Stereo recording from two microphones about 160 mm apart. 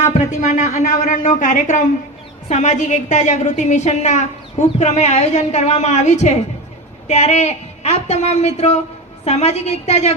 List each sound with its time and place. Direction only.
0.0 s a woman's voice: 50° left (ahead or behind)